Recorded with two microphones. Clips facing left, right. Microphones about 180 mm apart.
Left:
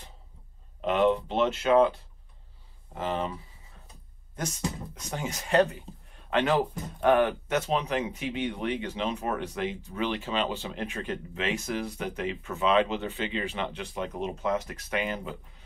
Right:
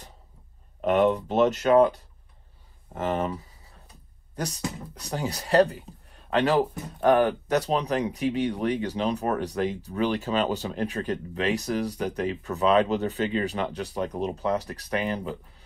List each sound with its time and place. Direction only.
0.7 s speech: 45° right (ahead or behind)